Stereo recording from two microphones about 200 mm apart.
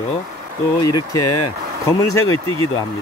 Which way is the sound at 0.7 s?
20° left (ahead or behind).